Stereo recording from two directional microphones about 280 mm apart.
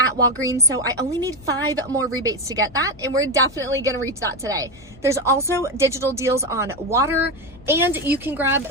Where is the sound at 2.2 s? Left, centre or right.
Centre.